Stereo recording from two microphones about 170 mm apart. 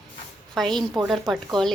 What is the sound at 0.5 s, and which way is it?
A woman's voice, 5° left (ahead or behind).